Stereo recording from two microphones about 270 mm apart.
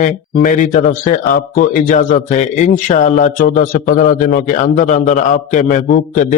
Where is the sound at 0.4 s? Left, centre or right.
Left.